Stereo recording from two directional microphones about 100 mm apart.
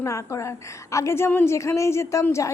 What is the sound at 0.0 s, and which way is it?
A woman's voice, 30° left (ahead or behind).